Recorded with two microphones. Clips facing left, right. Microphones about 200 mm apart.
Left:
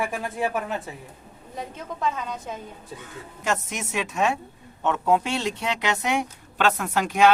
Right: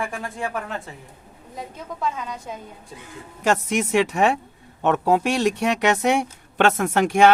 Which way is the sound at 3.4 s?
75° right (ahead or behind).